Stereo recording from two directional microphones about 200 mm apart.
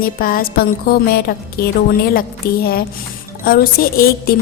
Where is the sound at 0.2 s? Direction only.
45° left (ahead or behind).